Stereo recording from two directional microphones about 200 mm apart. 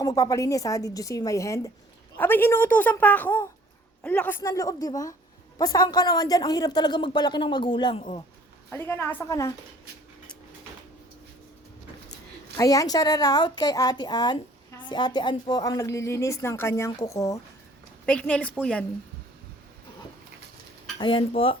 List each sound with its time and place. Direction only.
0.0 s a woman's voice: 15° left (ahead or behind)
8.7 s speech: 10° left (ahead or behind)
12.1 s a woman's voice: 15° left (ahead or behind)
18.0 s a woman's voice: 5° left (ahead or behind)
21.0 s a woman's voice: 25° left (ahead or behind)